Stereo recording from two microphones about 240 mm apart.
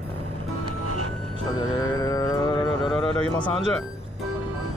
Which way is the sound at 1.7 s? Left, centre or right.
Centre.